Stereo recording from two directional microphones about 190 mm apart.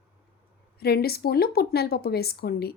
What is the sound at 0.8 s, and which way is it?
A woman's voice, 55° left (ahead or behind).